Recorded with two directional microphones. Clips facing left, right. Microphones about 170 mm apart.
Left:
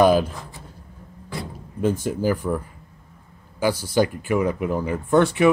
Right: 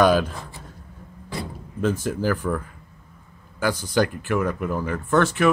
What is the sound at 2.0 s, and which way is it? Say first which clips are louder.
Speech: left 1 dB; 10° left (ahead or behind).